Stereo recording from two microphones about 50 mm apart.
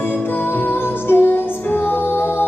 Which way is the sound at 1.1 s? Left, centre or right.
Left.